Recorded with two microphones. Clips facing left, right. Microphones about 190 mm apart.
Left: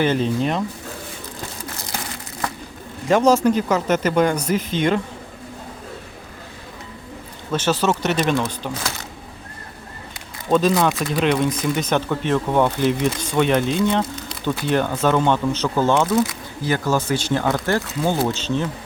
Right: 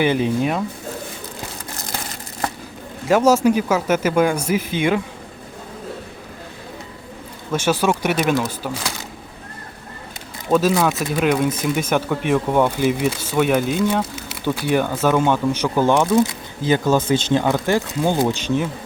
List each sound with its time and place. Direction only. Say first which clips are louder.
0.0 s speech: right 1 dB; 10° right (ahead or behind)
3.1 s speech: right 1 dB; 5° right (ahead or behind)
7.5 s speech: right 1 dB; 10° right (ahead or behind)
10.5 s speech: even; 5° right (ahead or behind)